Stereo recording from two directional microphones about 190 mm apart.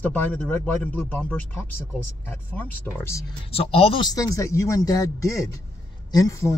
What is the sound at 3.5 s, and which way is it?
Speech, 30° left (ahead or behind).